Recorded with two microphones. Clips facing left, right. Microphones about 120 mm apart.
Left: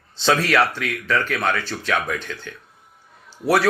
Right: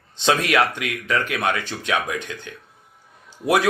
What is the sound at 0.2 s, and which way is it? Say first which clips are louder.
Speech: left 1 dB; 15° right (ahead or behind).